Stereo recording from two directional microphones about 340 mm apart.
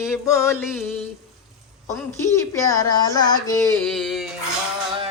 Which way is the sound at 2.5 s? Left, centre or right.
Centre.